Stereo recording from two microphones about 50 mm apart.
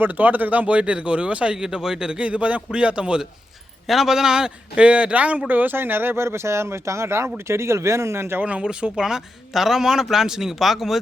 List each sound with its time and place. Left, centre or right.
0.0 s speech: right
1.6 s speech: centre
3.8 s speech: centre; by 5.4 s right
5.5 s speech: right
8.4 s speech: right
9.0 s speech: centre